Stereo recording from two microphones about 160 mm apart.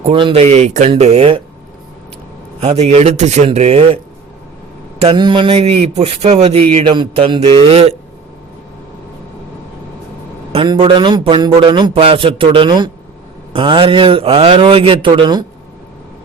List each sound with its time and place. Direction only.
0.0 s a man's voice: 35° right (ahead or behind)
2.6 s a man's voice: 45° right (ahead or behind)
10.5 s a man's voice: 35° right (ahead or behind)